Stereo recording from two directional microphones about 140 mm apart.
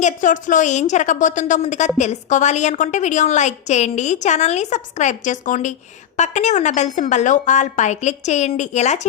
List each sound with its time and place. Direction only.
0.0 s a woman's voice: 65° left (ahead or behind)